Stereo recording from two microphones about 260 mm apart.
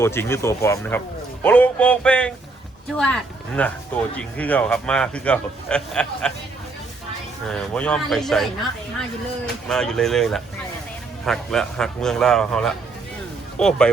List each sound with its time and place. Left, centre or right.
0.0 s speech: centre
7.4 s speech: centre
9.6 s speech: centre